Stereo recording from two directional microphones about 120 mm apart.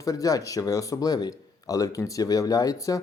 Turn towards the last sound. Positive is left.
turn(degrees=30)  # may be behind; listen again after turning